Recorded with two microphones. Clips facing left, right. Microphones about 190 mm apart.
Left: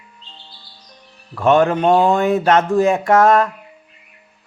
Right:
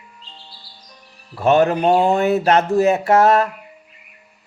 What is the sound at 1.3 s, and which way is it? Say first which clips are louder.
Speech: left 1 dB; 35° right (ahead or behind).